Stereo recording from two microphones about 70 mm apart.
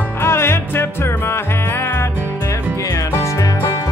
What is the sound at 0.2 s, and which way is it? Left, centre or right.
Music, left.